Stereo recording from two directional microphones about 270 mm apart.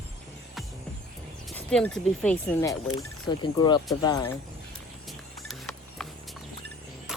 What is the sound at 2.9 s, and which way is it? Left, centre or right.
Speech, centre.